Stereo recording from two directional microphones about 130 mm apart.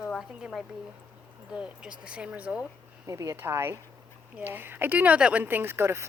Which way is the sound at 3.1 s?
25° right (ahead or behind).